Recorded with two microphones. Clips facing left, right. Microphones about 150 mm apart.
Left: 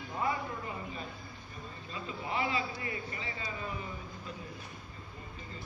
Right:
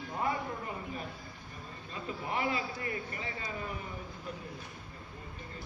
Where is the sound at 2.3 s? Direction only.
55° right (ahead or behind).